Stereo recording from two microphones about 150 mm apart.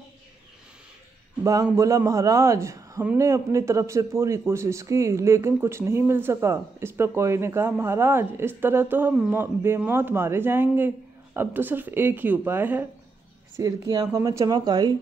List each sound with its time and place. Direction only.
1.4 s a man's voice: 20° right (ahead or behind)
13.6 s a man's voice: 25° right (ahead or behind)